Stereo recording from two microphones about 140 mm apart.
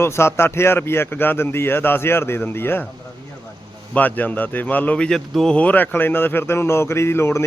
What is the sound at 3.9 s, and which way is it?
A man's voice, 10° left (ahead or behind).